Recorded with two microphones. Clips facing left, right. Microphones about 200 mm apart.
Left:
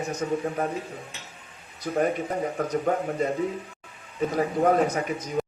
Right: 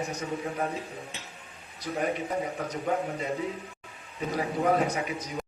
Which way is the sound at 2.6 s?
50° left (ahead or behind).